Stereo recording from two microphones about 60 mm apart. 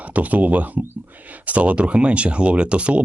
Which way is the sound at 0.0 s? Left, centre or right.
Right.